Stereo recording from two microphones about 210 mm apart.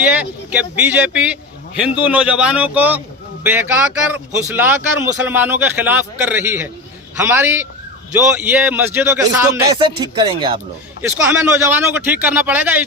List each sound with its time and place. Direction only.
0.0 s speech: 5° right (ahead or behind); by 10.6 s 25° right (ahead or behind)
11.3 s speech: 10° right (ahead or behind)